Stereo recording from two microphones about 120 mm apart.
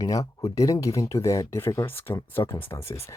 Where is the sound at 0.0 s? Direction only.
30° left (ahead or behind).